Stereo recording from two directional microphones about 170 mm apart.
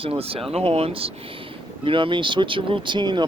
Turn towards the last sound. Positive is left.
turn(degrees=-25)  # may be behind; listen again after turning